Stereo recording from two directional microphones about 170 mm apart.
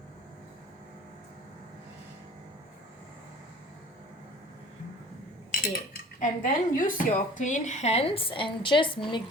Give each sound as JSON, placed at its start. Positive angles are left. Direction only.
{"t": 5.5, "sound": "speech", "side_deg": 55}